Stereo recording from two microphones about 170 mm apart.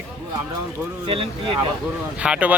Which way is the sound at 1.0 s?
30° right (ahead or behind).